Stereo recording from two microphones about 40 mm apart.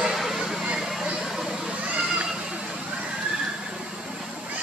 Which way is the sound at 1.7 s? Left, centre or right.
Right.